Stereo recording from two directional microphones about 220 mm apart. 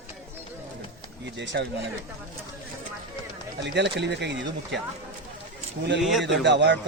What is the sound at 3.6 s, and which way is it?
A man's voice, 50° right (ahead or behind).